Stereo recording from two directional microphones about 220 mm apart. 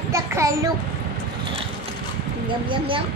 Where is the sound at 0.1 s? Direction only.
15° right (ahead or behind).